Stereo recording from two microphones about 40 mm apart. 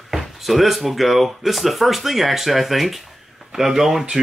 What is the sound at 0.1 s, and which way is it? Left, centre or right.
Speech, centre.